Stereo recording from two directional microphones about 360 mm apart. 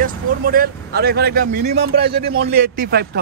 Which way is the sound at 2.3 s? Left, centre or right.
Right.